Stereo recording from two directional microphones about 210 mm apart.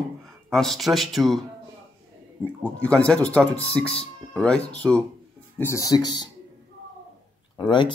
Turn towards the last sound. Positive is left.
turn(degrees=20)  # may be behind; listen again after turning